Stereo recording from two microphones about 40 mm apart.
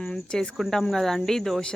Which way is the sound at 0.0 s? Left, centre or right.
Centre.